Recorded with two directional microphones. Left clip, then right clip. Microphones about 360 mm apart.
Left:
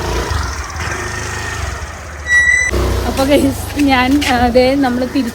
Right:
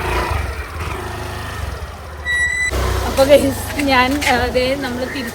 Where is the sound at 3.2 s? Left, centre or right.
Centre.